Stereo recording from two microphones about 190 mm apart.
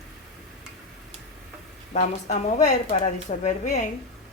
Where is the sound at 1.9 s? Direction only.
40° left (ahead or behind).